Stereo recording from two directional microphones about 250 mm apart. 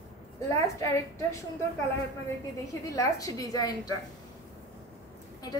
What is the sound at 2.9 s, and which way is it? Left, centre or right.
A woman's voice, centre.